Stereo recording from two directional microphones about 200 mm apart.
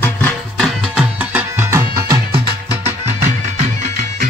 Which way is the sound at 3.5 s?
35° right (ahead or behind).